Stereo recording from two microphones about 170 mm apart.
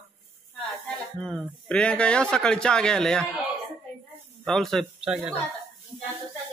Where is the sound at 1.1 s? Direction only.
5° left (ahead or behind).